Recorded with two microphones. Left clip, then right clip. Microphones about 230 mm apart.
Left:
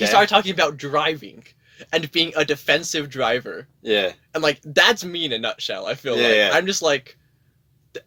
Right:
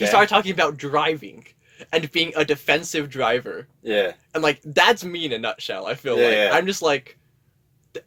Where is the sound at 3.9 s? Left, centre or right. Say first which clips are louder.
Left 1 dB; left.